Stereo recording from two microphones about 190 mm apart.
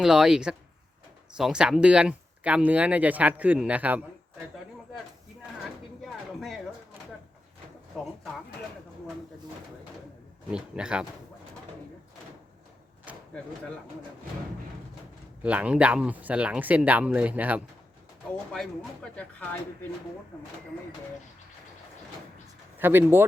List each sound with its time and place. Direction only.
0.0 s speech: 5° right (ahead or behind)
6.0 s a sound: centre (ahead or behind)
7.9 s speech: centre (ahead or behind)
10.5 s speech: 5° right (ahead or behind)
13.1 s a sound: 5° right (ahead or behind)
15.4 s speech: 5° right (ahead or behind)
18.5 s speech: 5° left (ahead or behind)
22.8 s speech: 10° right (ahead or behind)